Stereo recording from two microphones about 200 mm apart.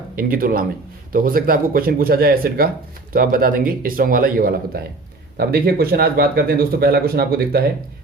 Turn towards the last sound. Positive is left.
turn(degrees=-50)  # may be behind; listen again after turning